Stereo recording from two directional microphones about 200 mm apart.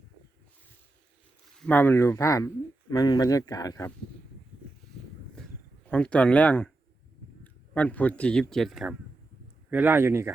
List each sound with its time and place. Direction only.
1.5 s speech: 5° left (ahead or behind)
5.3 s a sound: 5° left (ahead or behind)
7.4 s a man's voice: 5° left (ahead or behind); by 10.3 s 10° right (ahead or behind)